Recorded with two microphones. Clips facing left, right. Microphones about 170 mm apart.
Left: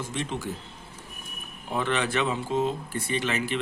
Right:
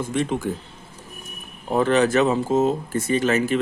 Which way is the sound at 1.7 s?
40° right (ahead or behind).